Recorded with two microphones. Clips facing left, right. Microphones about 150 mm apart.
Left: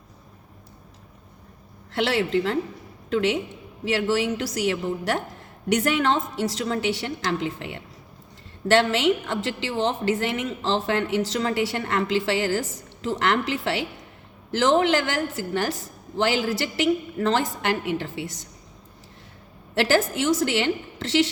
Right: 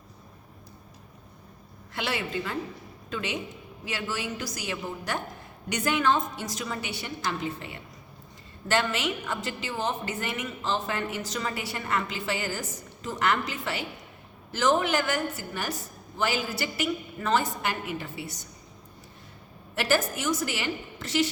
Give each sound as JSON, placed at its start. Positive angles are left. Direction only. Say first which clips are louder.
{"t": 2.0, "sound": "a woman's voice", "louder": "left 9 dB", "side_deg": 75}
{"t": 19.7, "sound": "a woman's voice", "louder": "left 5 dB", "side_deg": 90}